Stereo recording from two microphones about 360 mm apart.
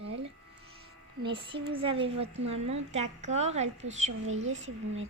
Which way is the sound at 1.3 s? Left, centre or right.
Centre.